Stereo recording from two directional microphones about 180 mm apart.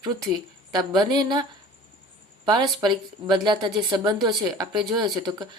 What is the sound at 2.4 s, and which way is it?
Speech, 25° right (ahead or behind).